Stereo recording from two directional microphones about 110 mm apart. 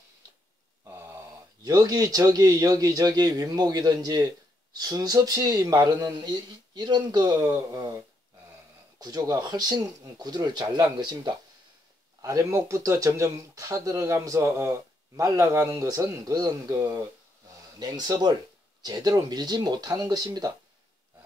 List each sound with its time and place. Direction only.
1.6 s speech: 35° right (ahead or behind)
9.0 s speech: 35° right (ahead or behind)
12.2 s speech: 30° right (ahead or behind)